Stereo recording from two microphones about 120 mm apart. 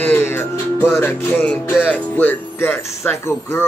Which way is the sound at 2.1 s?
15° left (ahead or behind).